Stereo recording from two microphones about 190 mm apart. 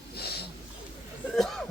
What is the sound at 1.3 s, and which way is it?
Speech, centre (ahead or behind).